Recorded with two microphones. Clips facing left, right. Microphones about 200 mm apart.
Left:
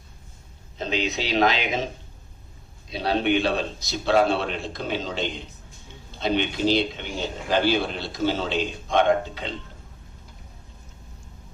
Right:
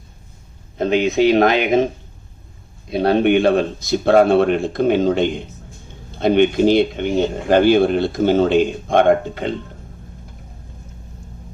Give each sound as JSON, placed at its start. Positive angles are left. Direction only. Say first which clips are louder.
{"t": 0.8, "sound": "speech", "louder": "right 12 dB", "side_deg": -55}
{"t": 2.9, "sound": "speech", "louder": "right 8 dB", "side_deg": -55}